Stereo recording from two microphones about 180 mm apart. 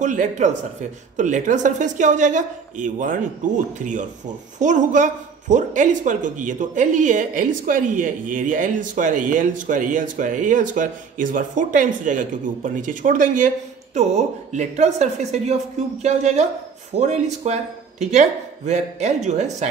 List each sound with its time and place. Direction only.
0.0 s speech: 45° right (ahead or behind)